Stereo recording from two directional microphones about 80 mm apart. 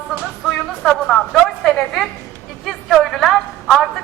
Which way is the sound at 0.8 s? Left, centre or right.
Centre.